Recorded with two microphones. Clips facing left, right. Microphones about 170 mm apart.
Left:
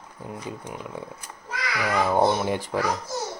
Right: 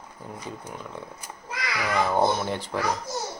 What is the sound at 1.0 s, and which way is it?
Speech, 10° left (ahead or behind).